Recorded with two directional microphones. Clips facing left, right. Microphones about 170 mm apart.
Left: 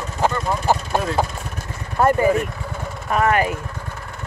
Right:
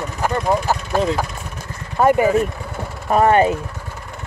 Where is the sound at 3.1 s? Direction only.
30° right (ahead or behind).